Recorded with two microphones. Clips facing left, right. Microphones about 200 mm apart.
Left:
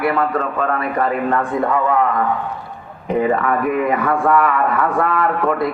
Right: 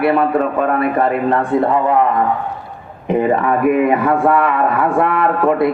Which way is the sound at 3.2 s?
25° right (ahead or behind).